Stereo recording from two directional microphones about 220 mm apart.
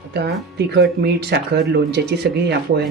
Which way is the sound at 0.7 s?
50° right (ahead or behind).